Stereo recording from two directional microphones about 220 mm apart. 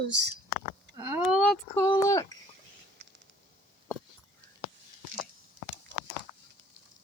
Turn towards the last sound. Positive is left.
turn(degrees=-60)  # may be behind; listen again after turning